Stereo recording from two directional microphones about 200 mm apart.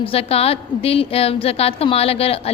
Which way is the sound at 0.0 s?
30° left (ahead or behind).